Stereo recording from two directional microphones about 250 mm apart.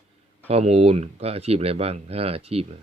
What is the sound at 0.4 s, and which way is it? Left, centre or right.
Speech, right.